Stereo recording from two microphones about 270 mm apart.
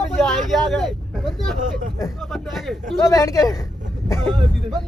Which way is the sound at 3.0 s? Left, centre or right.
Centre.